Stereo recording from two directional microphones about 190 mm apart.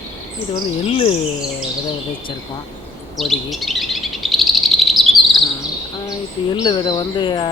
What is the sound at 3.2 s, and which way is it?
Chirp, centre (ahead or behind).